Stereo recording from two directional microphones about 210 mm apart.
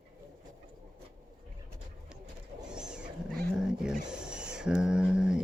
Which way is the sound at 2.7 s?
5° right (ahead or behind).